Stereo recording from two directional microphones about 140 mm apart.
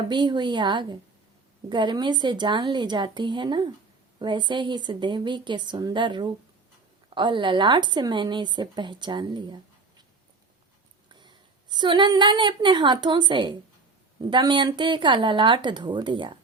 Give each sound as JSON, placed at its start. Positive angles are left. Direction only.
{"t": 0.1, "sound": "speech", "side_deg": -35}
{"t": 11.1, "sound": "a woman's voice", "side_deg": -35}